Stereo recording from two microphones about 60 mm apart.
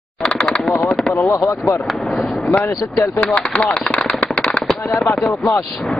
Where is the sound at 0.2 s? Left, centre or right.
Centre.